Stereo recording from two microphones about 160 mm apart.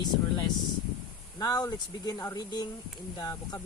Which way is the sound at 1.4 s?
25° left (ahead or behind).